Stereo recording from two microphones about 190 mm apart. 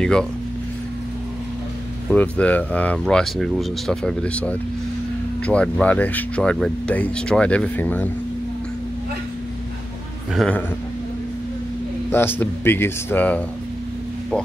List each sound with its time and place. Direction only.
0.0 s speech: 5° left (ahead or behind)
2.0 s speech: 5° left (ahead or behind)
10.3 s speech: centre (ahead or behind)
12.1 s speech: 10° left (ahead or behind)